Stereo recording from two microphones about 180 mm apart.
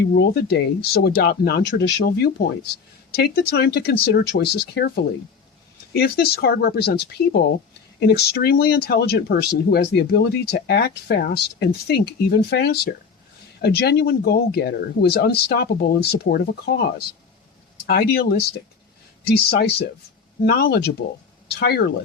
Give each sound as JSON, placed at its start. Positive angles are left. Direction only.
{"t": 0.1, "sound": "speech", "side_deg": 65}
{"t": 5.9, "sound": "speech", "side_deg": 65}
{"t": 17.8, "sound": "speech", "side_deg": 60}